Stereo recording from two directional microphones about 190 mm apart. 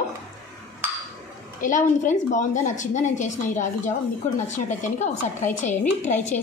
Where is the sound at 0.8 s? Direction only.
10° right (ahead or behind).